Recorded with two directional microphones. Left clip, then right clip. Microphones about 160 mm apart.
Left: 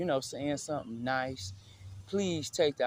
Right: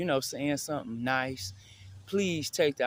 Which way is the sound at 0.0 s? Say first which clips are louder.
Right 2 dB; 40° right (ahead or behind).